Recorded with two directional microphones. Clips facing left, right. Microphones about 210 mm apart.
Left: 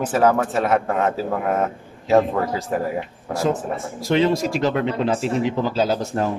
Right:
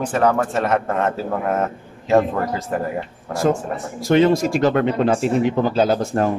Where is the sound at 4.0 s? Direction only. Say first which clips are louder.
Right 4 dB; 50° right (ahead or behind).